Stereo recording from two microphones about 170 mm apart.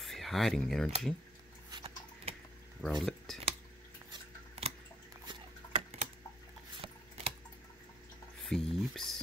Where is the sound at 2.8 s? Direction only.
Centre (ahead or behind).